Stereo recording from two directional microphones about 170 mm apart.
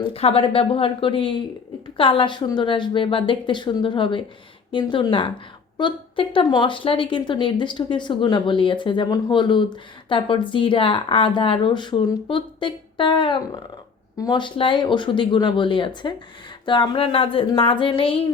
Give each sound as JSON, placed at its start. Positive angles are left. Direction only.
{"t": 0.0, "sound": "speech", "side_deg": 35}